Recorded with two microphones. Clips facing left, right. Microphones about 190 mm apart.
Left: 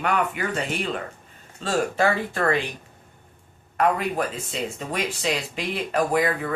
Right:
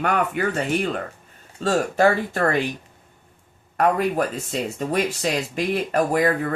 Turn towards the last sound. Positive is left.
turn(degrees=-45)  # may be behind; listen again after turning